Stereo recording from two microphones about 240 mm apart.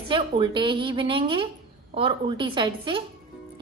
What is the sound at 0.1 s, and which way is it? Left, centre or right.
A woman's voice, centre.